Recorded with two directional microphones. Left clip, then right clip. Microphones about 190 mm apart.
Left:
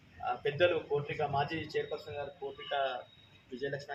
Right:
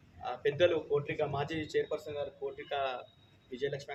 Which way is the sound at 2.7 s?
15° right (ahead or behind).